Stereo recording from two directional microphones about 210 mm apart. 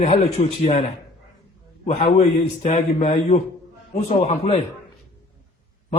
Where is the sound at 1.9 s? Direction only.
30° left (ahead or behind).